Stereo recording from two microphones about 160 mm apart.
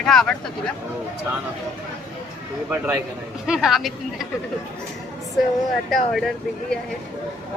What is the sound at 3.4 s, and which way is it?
Speech, 5° right (ahead or behind).